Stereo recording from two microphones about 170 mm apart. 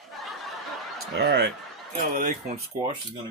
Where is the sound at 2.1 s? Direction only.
50° right (ahead or behind).